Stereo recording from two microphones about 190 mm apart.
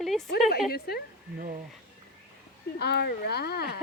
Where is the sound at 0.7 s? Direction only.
55° left (ahead or behind).